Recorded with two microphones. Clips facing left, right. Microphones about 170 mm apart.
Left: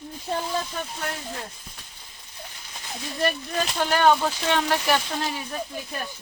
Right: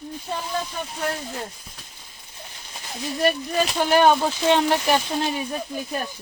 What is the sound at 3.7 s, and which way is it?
Speech, 15° right (ahead or behind).